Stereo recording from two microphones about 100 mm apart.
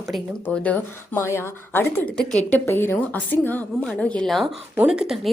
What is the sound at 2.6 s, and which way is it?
A woman's voice, 25° left (ahead or behind).